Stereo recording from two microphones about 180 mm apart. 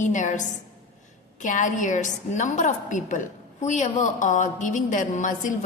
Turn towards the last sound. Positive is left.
turn(degrees=45)  # may be behind; listen again after turning